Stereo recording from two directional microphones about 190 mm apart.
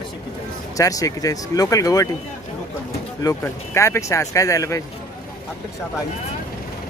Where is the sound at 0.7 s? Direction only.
20° left (ahead or behind).